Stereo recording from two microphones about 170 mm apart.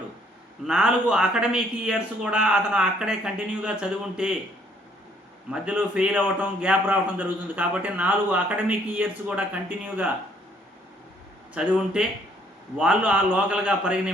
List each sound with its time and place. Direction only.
0.7 s a man's voice: 5° right (ahead or behind)
5.5 s a man's voice: 10° right (ahead or behind)
11.5 s a man's voice: 5° right (ahead or behind)